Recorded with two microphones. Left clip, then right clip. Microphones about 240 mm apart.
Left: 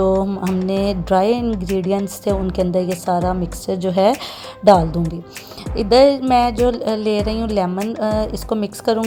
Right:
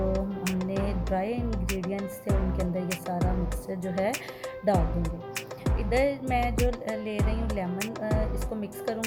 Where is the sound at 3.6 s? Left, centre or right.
Left.